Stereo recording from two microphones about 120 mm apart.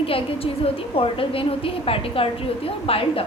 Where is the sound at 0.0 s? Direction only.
50° left (ahead or behind).